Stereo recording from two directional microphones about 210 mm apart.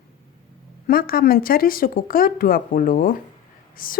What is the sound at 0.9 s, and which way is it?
A woman's voice, 45° left (ahead or behind).